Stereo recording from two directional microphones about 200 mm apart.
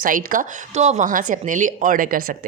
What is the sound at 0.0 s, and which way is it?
A woman's voice, 45° right (ahead or behind).